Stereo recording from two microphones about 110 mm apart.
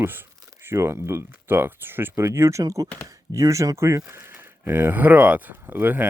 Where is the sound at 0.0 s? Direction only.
20° right (ahead or behind).